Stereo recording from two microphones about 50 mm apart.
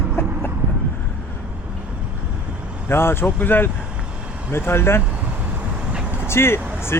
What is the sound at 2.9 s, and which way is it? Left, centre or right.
Speech, left.